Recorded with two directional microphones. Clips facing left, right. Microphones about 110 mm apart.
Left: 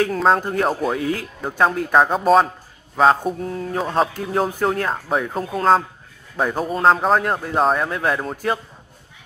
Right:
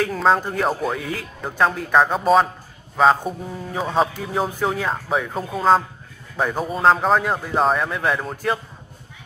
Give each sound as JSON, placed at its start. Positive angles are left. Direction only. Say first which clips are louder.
{"t": 0.0, "sound": "a man's voice", "louder": "left 1 dB", "side_deg": 0}